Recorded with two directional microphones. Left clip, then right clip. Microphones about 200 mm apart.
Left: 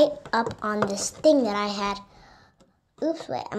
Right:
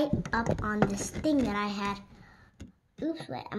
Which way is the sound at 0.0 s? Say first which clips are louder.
Left 8 dB; 20° right (ahead or behind).